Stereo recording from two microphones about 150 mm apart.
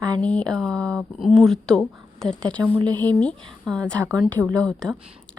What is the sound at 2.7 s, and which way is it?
Speech, 30° right (ahead or behind).